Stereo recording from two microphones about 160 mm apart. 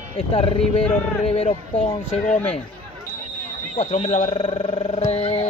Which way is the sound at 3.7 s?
45° left (ahead or behind).